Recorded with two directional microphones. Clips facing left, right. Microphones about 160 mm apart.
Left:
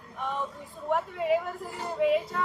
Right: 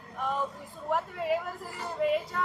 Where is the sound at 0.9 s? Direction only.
Centre (ahead or behind).